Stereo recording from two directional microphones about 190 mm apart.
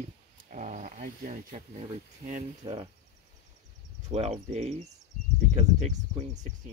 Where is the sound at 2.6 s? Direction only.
20° right (ahead or behind).